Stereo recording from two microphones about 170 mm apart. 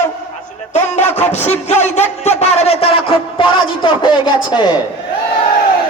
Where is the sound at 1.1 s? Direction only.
40° left (ahead or behind).